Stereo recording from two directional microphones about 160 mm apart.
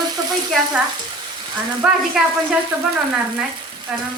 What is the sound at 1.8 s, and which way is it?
Speech, 5° right (ahead or behind).